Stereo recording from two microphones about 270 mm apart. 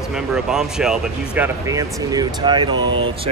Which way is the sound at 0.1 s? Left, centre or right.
Centre.